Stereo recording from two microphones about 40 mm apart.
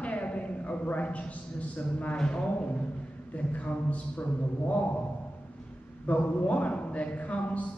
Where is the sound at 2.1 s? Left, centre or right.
Left.